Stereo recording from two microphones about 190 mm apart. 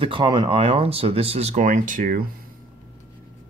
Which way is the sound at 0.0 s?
25° right (ahead or behind).